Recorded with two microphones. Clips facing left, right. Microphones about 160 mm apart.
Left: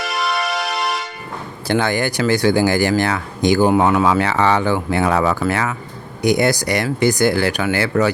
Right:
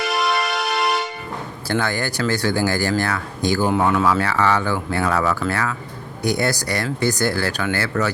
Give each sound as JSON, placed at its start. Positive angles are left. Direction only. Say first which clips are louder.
{"t": 0.0, "sound": "music", "louder": "right 1 dB", "side_deg": 0}
{"t": 1.6, "sound": "speech", "louder": "left 5 dB", "side_deg": 15}